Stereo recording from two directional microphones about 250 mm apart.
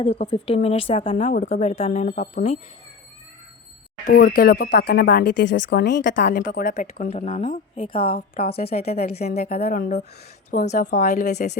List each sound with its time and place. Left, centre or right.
0.0 s speech: left
4.0 s speech: left
8.4 s a woman's voice: left
8.7 s speech: left
9.3 s a woman's voice: left